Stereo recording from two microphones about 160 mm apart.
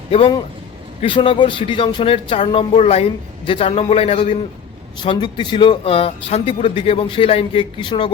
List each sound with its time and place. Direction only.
0.1 s speech: 30° left (ahead or behind)